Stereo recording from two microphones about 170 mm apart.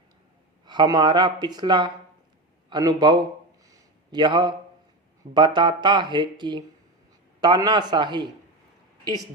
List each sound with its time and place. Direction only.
0.6 s speech: 25° right (ahead or behind)
3.7 s a sound: 25° right (ahead or behind)
5.3 s speech: 25° right (ahead or behind)